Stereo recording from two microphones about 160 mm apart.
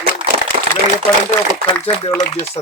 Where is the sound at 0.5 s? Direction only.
90° right.